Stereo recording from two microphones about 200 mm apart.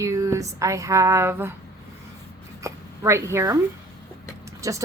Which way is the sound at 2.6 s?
15° right (ahead or behind).